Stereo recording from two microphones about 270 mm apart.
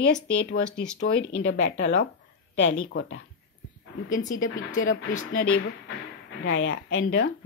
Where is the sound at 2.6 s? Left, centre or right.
Left.